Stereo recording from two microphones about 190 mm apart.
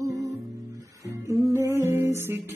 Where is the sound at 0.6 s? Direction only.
15° right (ahead or behind).